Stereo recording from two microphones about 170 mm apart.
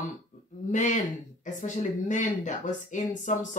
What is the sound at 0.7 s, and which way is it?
Speech, 45° left (ahead or behind).